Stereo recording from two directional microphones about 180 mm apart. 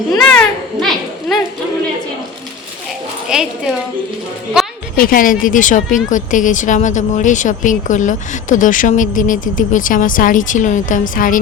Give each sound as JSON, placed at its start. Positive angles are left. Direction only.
{"t": 0.2, "sound": "a child's voice", "side_deg": 5}
{"t": 3.2, "sound": "a woman's voice", "side_deg": -5}
{"t": 4.9, "sound": "speech", "side_deg": 50}